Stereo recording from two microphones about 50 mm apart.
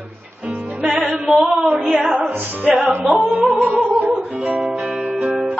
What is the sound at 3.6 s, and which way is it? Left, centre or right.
Music, right.